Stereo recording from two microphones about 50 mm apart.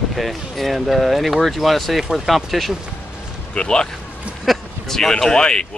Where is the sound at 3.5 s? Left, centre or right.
Centre.